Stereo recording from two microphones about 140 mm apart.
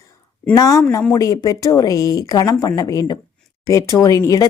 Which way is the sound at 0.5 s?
25° left (ahead or behind).